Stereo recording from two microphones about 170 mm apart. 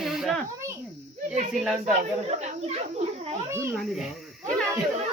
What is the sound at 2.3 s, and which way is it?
Speech, 40° right (ahead or behind).